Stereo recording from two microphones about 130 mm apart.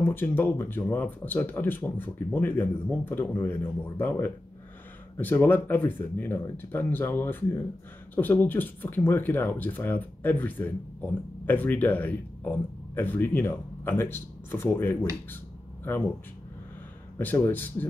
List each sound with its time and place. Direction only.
0.0 s speech: 15° left (ahead or behind)
17.2 s speech: 15° left (ahead or behind)